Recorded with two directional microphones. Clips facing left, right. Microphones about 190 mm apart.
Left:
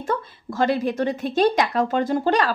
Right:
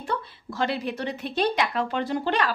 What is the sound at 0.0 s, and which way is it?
A woman's voice, 45° left (ahead or behind).